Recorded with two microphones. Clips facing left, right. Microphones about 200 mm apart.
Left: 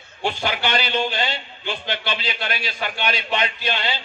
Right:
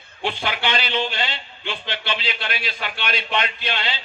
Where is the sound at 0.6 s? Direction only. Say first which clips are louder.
Left 1 dB; 50° left (ahead or behind).